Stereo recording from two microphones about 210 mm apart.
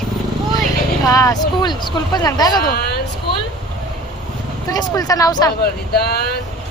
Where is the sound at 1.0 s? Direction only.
15° left (ahead or behind).